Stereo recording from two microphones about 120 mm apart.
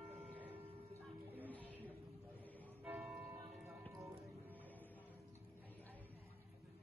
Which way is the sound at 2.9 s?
10° right (ahead or behind).